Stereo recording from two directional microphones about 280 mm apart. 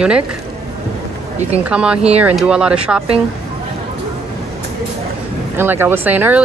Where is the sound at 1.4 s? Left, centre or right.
Right.